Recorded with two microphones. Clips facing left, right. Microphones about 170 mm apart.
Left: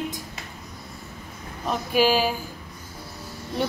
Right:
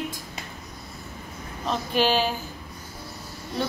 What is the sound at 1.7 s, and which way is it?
Speech, 10° left (ahead or behind).